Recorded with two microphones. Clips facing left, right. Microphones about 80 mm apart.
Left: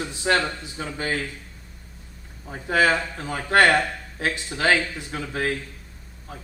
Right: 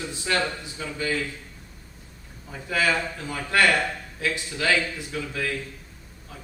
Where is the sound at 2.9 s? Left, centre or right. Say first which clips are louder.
Left 2 dB; left.